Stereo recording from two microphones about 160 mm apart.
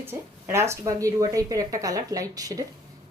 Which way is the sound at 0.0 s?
15° right (ahead or behind).